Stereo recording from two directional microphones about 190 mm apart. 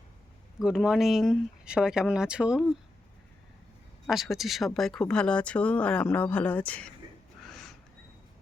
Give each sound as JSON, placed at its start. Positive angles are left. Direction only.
{"t": 0.6, "sound": "speech", "side_deg": -5}
{"t": 4.0, "sound": "speech", "side_deg": 0}
{"t": 7.4, "sound": "a sound", "side_deg": 0}